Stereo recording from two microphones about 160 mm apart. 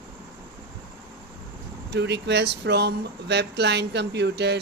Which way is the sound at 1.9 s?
90° right.